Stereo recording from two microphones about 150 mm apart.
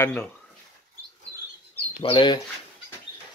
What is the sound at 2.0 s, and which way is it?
Speech, 30° left (ahead or behind).